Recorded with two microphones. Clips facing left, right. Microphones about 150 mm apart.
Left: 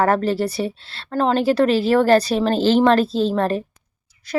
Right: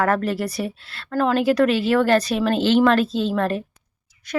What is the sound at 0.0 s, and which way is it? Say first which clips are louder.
A woman's voice: left 3 dB; 30° left (ahead or behind).